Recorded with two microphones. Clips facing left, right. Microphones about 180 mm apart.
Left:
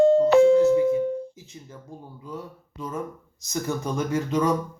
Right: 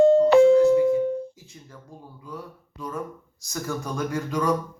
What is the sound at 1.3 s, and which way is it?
Music, 20° left (ahead or behind).